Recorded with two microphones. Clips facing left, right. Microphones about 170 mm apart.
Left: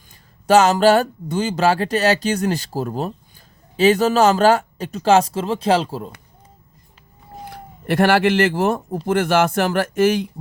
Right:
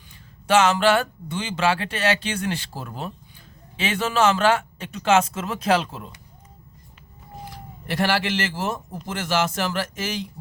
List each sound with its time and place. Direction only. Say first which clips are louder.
0.4 s speech: left 5 dB; 40° left (ahead or behind)
7.4 s speech: left 9 dB; 60° left (ahead or behind)